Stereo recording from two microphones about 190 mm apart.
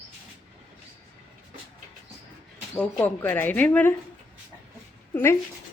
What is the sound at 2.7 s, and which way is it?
Speech, 10° left (ahead or behind).